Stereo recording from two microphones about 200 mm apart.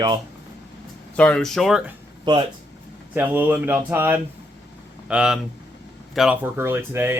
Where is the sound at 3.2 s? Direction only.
10° right (ahead or behind).